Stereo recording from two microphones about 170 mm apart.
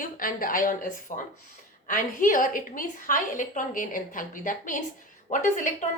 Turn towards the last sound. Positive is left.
turn(degrees=50)  # may be behind; listen again after turning